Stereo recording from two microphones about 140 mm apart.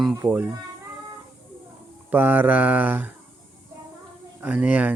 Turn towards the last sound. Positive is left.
turn(degrees=-10)  # may be behind; listen again after turning